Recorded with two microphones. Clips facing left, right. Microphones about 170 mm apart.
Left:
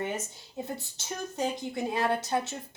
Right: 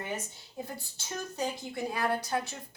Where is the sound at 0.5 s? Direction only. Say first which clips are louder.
Left 4 dB; 20° left (ahead or behind).